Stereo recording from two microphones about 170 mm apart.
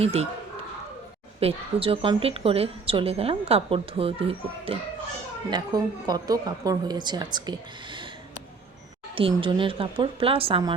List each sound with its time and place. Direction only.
0.0 s a woman's voice: 40° right (ahead or behind)
1.4 s a woman's voice: 35° right (ahead or behind)
5.5 s a woman's voice: 25° right (ahead or behind)
9.3 s a woman's voice: 30° right (ahead or behind)